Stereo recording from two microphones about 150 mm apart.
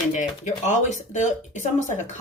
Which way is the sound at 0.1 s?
50° left (ahead or behind).